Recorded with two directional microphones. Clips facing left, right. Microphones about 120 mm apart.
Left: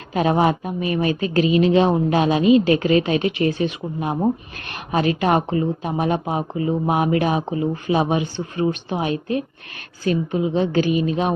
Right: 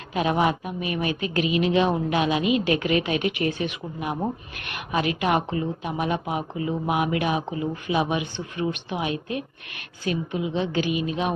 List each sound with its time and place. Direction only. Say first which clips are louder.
0.1 s a woman's voice: left 4 dB; 35° left (ahead or behind)